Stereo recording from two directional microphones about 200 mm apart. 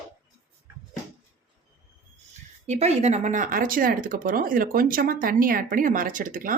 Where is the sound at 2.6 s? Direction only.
35° right (ahead or behind).